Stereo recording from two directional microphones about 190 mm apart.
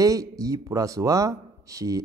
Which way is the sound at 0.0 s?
20° right (ahead or behind).